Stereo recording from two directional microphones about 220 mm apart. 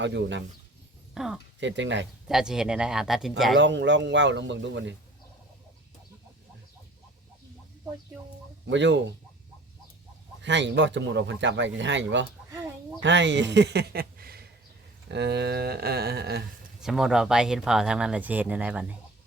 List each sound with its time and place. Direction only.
0.0 s speech: 55° right (ahead or behind)
1.1 s speech: centre (ahead or behind)
1.5 s speech: 55° right (ahead or behind)
2.2 s speech: centre (ahead or behind)
3.6 s speech: 55° right (ahead or behind)
8.7 s speech: 55° right (ahead or behind)
10.4 s speech: 55° right (ahead or behind)
16.8 s speech: centre (ahead or behind)